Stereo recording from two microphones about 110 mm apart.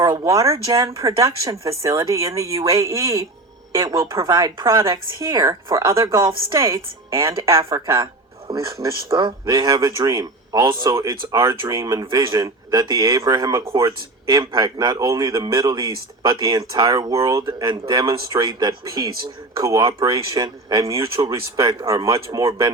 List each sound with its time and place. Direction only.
0.0 s speech: 35° right (ahead or behind)
7.9 s a sound: 55° right (ahead or behind)
8.6 s speech: 35° right (ahead or behind)